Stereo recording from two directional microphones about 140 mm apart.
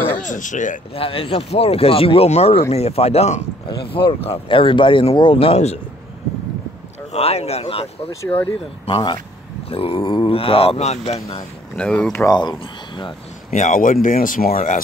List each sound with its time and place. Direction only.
0.2 s speech: 65° left (ahead or behind)
0.9 s speech: 40° left (ahead or behind)
3.6 s speech: 35° left (ahead or behind)
7.1 s speech: 45° left (ahead or behind)
11.7 s speech: 10° left (ahead or behind)
12.2 s speech: 30° left (ahead or behind)
13.5 s speech: 70° left (ahead or behind)